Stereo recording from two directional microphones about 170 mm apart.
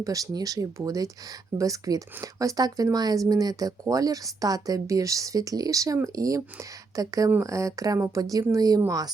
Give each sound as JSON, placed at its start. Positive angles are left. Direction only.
{"t": 0.0, "sound": "speech", "side_deg": -20}